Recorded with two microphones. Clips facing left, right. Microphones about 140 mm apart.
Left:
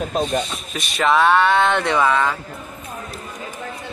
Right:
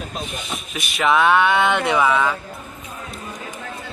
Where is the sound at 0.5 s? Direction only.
Centre (ahead or behind).